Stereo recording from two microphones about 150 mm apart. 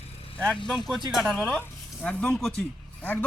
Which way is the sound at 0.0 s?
40° left (ahead or behind).